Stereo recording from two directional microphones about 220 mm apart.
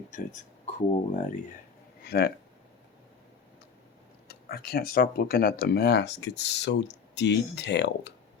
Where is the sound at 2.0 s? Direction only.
45° left (ahead or behind).